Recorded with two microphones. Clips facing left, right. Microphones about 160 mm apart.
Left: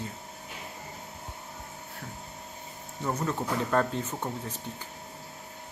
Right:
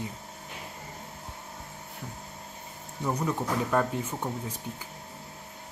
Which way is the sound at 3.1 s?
10° right (ahead or behind).